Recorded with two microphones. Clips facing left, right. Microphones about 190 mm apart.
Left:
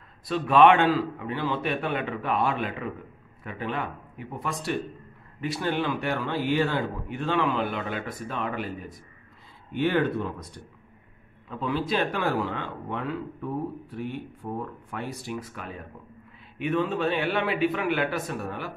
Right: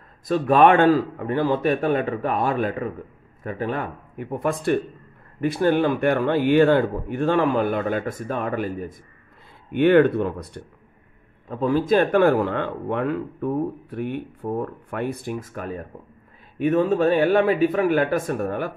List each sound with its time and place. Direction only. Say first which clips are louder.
0.3 s speech: right 3 dB; 45° right (ahead or behind)
9.7 s speech: right 9 dB; 60° right (ahead or behind)
11.4 s speech: right 7 dB; 45° right (ahead or behind)